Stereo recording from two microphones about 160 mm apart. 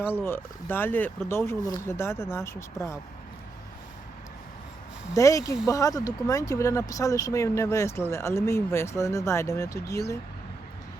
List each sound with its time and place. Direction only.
0.2 s speech: 15° left (ahead or behind)
5.1 s speech: 20° left (ahead or behind)